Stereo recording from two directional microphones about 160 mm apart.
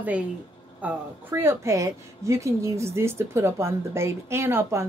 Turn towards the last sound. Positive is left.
turn(degrees=-15)  # may be behind; listen again after turning